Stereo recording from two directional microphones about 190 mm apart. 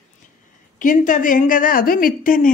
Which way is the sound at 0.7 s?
45° left (ahead or behind).